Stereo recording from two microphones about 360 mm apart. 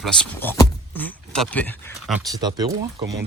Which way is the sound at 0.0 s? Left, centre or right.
Centre.